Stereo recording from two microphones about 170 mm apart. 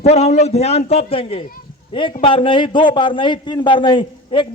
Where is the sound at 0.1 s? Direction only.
40° left (ahead or behind).